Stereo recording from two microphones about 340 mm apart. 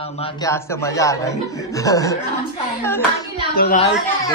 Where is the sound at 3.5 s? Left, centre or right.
Left.